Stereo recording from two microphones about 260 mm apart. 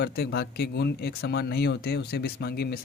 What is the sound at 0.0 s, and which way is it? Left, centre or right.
Speech, left.